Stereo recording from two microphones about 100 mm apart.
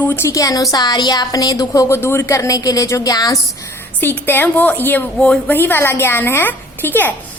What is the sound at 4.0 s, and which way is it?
A woman's voice, 20° left (ahead or behind).